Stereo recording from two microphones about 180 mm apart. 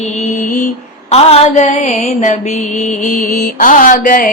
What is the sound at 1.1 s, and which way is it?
Mantra, 35° left (ahead or behind).